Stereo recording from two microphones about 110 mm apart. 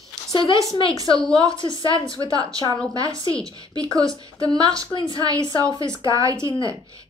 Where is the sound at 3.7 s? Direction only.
35° right (ahead or behind).